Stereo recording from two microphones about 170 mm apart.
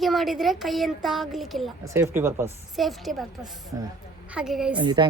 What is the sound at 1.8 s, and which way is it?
Speech, 15° right (ahead or behind).